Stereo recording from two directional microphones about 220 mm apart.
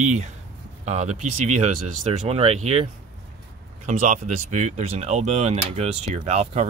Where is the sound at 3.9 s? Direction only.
35° right (ahead or behind).